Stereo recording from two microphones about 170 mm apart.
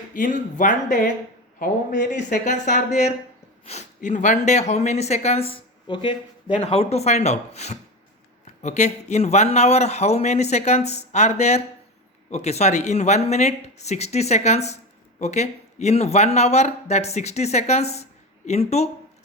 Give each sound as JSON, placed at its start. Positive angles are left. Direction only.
{"t": 0.1, "sound": "speech", "side_deg": 50}
{"t": 1.5, "sound": "a man's voice", "side_deg": 65}
{"t": 2.0, "sound": "speech", "side_deg": 45}